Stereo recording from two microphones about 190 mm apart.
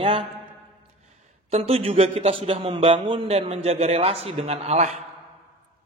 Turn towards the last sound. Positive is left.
turn(degrees=-35)  # may be behind; listen again after turning